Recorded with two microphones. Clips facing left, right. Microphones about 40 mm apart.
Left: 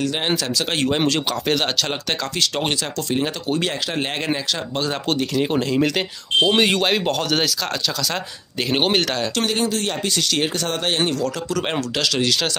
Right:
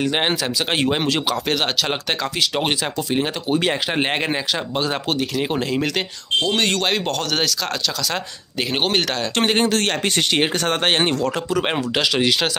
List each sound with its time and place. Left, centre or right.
0.3 s speech: centre
6.4 s speech: centre
8.7 s speech: centre
9.7 s speech: right
10.3 s speech: right
11.5 s speech: centre